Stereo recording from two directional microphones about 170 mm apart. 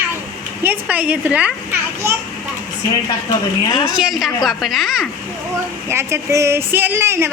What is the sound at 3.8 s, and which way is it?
A woman's voice, 5° right (ahead or behind).